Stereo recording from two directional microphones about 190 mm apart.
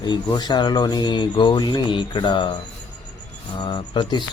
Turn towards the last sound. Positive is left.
turn(degrees=25)  # may be behind; listen again after turning